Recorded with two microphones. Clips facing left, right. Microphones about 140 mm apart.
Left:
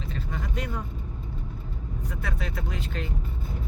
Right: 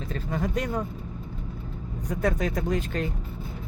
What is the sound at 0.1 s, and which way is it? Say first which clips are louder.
Vehicle: right 7 dB; 45° right (ahead or behind).